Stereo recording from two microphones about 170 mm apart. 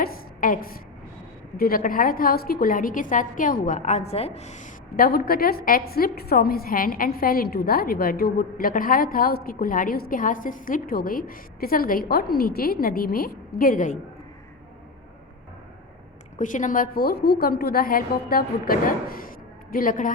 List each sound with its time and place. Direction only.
0.0 s a sound: 55° left (ahead or behind)
1.5 s a woman's voice: 60° left (ahead or behind)
16.4 s a woman's voice: 50° left (ahead or behind)